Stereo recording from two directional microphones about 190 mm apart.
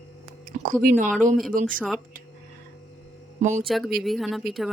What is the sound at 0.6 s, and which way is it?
Speech, 45° right (ahead or behind).